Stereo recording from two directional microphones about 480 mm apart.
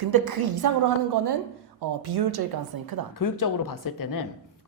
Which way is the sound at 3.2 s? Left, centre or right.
Left.